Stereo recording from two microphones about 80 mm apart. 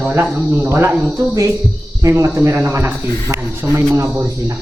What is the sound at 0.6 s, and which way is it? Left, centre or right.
Speech, right.